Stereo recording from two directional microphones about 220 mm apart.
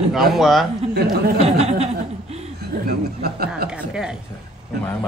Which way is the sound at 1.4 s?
30° right (ahead or behind).